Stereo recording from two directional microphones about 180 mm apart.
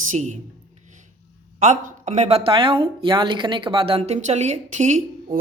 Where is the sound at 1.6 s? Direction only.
40° right (ahead or behind).